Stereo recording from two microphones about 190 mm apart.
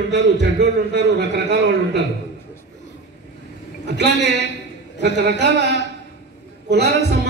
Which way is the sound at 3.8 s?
65° right (ahead or behind).